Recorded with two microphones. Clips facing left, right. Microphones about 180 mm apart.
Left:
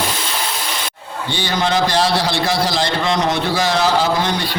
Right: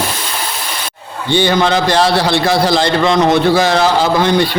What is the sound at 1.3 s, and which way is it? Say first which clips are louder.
A man's voice: right 7 dB; 60° right (ahead or behind).